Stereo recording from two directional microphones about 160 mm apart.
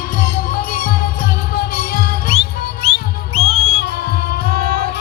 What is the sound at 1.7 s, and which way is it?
Music, 65° left (ahead or behind).